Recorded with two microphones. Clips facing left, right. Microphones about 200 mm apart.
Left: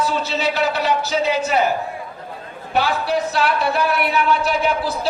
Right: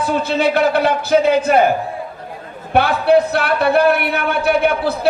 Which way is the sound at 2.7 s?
60° right (ahead or behind).